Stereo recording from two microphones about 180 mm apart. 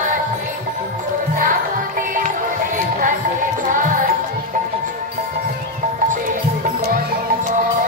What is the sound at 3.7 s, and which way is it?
Music, 45° right (ahead or behind).